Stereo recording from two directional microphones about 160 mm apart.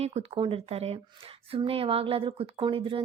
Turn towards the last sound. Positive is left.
turn(degrees=-30)  # may be behind; listen again after turning